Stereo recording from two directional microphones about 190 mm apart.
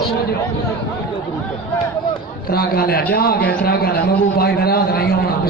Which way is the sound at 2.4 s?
55° left (ahead or behind).